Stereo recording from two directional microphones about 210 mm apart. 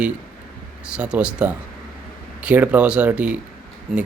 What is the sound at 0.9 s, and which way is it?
Speech, 5° right (ahead or behind).